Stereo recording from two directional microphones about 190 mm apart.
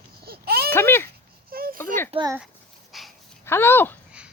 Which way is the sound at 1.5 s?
50° right (ahead or behind).